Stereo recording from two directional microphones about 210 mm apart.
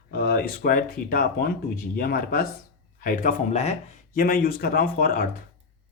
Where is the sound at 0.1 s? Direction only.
50° left (ahead or behind).